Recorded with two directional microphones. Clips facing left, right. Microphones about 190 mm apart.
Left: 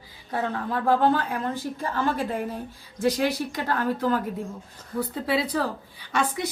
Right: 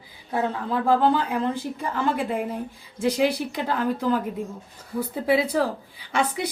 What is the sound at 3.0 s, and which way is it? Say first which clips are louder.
Speech: right 2 dB; 10° right (ahead or behind).